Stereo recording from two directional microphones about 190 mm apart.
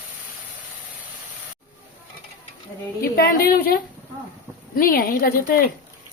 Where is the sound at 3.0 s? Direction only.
55° left (ahead or behind).